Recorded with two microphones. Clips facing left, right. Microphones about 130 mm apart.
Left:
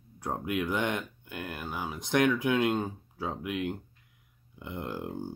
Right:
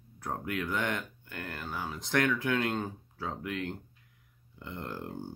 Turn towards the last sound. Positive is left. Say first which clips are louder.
# left 3 dB
turn(degrees=15)  # may be behind; listen again after turning